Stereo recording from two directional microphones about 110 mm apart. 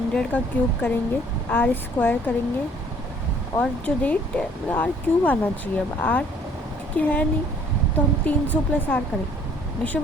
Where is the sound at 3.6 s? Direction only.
15° left (ahead or behind).